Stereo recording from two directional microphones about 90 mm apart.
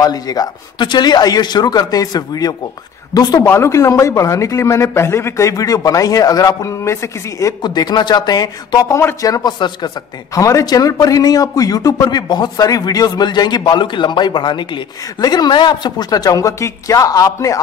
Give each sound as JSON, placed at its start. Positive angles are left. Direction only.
{"t": 0.0, "sound": "a man's voice", "side_deg": 45}
{"t": 3.4, "sound": "a man's voice", "side_deg": 30}
{"t": 7.6, "sound": "a man's voice", "side_deg": 50}
{"t": 10.3, "sound": "a man's voice", "side_deg": 40}